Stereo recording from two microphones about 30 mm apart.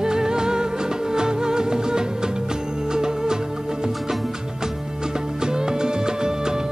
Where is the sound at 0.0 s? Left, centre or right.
Right.